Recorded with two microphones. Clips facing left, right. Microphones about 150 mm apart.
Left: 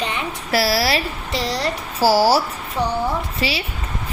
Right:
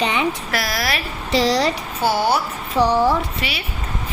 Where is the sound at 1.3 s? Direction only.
85° right.